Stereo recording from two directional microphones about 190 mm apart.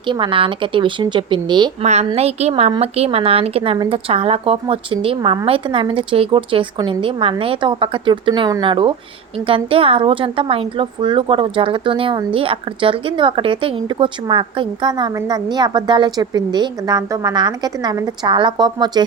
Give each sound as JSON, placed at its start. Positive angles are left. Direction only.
{"t": 0.1, "sound": "a woman's voice", "side_deg": -25}
{"t": 1.8, "sound": "a woman's voice", "side_deg": -35}